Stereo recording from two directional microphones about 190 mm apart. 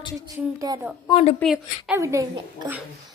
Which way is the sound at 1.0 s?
30° left (ahead or behind).